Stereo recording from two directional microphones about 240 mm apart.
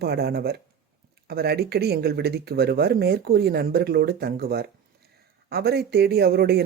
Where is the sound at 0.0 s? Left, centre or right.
Right.